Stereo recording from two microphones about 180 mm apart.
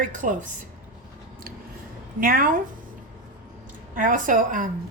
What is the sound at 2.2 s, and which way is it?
Speech, 50° right (ahead or behind).